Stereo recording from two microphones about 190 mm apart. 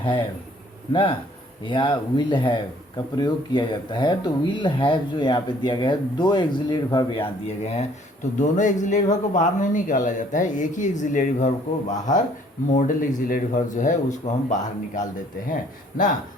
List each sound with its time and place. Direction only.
0.0 s speech: 25° left (ahead or behind)
1.6 s speech: 25° left (ahead or behind); by 15.0 s 40° left (ahead or behind)